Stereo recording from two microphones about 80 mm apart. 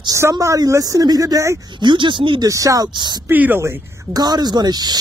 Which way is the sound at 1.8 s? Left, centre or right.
Right.